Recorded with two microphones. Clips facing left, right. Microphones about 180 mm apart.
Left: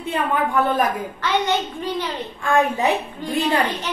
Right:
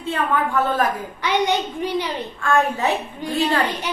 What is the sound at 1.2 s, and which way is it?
A child's voice, 15° right (ahead or behind).